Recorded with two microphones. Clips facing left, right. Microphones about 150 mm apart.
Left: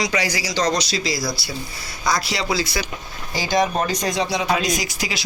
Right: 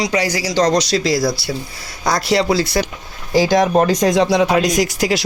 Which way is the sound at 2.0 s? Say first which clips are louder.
Right 7 dB; 50° right (ahead or behind).